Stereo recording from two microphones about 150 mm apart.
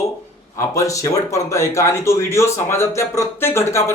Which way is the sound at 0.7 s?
20° left (ahead or behind).